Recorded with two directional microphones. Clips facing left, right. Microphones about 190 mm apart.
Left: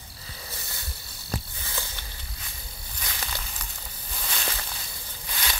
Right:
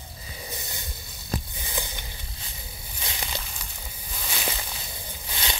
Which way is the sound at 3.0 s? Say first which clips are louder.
Right 2 dB; 20° right (ahead or behind).